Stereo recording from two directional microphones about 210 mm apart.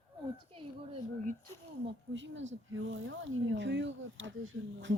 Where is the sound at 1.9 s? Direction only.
60° right (ahead or behind).